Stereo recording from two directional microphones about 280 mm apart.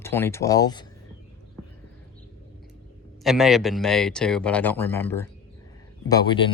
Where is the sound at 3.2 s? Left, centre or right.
Centre.